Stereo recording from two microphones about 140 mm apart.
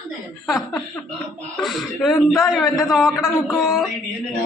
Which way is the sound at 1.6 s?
Centre (ahead or behind).